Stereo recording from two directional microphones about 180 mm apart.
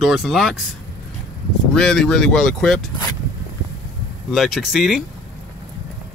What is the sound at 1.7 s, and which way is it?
Speech, 5° left (ahead or behind).